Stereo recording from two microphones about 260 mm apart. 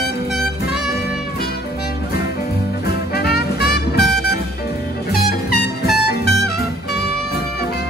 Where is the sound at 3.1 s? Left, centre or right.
Left.